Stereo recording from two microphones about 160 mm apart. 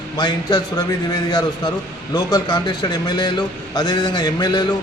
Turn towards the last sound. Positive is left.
turn(degrees=25)  # may be behind; listen again after turning